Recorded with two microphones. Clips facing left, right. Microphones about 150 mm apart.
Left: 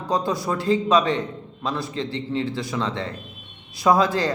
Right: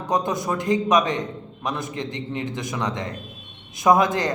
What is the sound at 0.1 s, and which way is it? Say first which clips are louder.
A man's voice: even; 20° right (ahead or behind).